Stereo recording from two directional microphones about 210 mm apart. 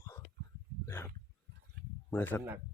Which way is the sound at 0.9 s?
10° left (ahead or behind).